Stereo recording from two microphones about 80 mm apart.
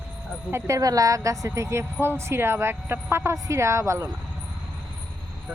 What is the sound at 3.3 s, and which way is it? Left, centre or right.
Speech, right.